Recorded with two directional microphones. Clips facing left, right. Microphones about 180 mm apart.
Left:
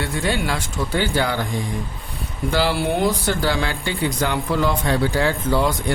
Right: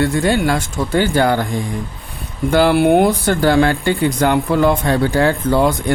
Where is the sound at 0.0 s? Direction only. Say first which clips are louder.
Right 8 dB; 45° right (ahead or behind).